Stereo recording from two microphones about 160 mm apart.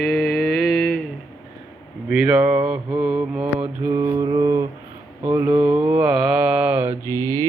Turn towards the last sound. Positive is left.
turn(degrees=15)  # may be behind; listen again after turning